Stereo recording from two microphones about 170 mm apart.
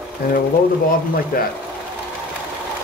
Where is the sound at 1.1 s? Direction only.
60° left (ahead or behind).